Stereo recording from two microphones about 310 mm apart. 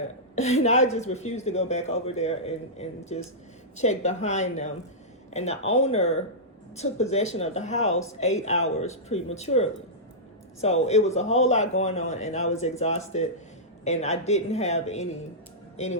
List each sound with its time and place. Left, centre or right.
0.6 s speech: left